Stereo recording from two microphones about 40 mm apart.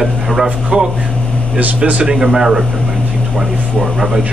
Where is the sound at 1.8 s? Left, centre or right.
Right.